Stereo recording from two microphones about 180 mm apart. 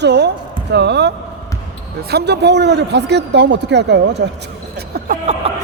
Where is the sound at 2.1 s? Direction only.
70° right (ahead or behind).